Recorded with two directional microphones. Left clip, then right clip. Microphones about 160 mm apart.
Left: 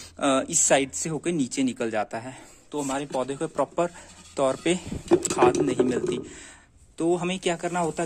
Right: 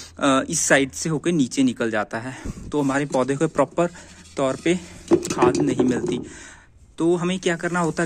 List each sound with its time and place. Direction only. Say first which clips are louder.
0.2 s speech: right 3 dB; 5° left (ahead or behind)
2.7 s speech: right 7 dB; 15° right (ahead or behind)
4.4 s speech: right 2 dB; 10° left (ahead or behind)